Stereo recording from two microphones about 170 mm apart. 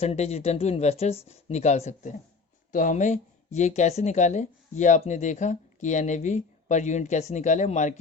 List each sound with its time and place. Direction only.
0.0 s speech: 40° left (ahead or behind)